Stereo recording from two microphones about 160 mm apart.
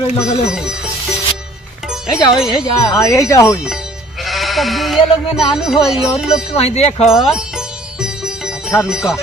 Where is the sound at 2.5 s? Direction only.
20° left (ahead or behind).